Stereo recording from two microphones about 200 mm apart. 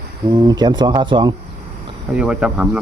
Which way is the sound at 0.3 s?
20° right (ahead or behind).